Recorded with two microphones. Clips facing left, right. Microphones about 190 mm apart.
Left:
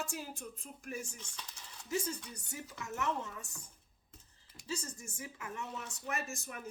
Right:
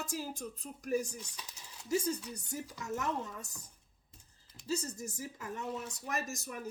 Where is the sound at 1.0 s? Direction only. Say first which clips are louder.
Right 4 dB; 10° right (ahead or behind).